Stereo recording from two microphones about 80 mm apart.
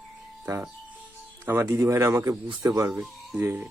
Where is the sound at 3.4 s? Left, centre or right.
Right.